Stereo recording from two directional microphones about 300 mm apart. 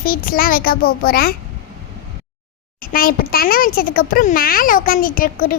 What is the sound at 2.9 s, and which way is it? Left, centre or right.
A child's voice, left.